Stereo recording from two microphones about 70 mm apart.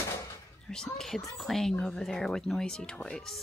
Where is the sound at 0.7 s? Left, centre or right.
Centre.